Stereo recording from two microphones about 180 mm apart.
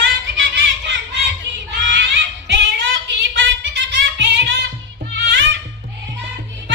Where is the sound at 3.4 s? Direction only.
85° right.